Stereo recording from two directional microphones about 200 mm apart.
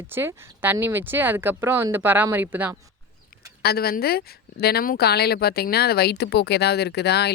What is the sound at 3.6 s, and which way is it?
Speech, 50° left (ahead or behind).